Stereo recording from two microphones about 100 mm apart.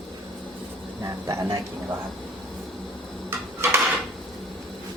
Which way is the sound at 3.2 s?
25° right (ahead or behind).